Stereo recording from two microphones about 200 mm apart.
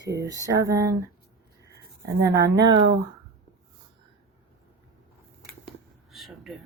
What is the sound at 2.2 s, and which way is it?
Speech, 15° right (ahead or behind).